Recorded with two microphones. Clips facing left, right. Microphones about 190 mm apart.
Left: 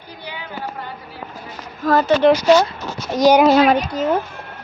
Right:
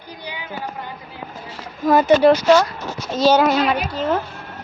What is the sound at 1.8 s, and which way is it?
Speech, 15° right (ahead or behind).